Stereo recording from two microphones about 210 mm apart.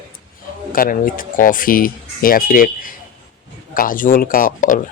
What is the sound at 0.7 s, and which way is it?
Speech, 40° left (ahead or behind).